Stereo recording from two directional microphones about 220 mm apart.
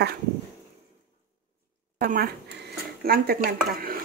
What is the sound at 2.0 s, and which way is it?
Speech, 40° right (ahead or behind).